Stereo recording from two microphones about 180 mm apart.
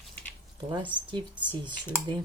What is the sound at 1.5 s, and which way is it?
Speech, 25° right (ahead or behind).